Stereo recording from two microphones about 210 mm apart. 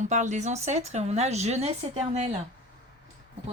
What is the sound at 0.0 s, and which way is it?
A woman's voice, 35° right (ahead or behind).